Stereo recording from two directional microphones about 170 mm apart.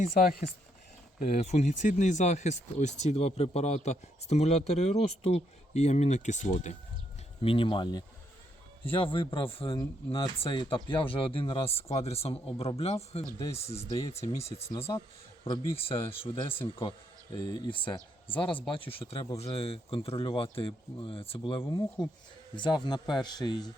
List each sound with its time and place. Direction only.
0.0 s speech: 55° left (ahead or behind)
1.2 s speech: 40° left (ahead or behind)
7.4 s speech: 30° left (ahead or behind)
21.6 s speech: 20° left (ahead or behind)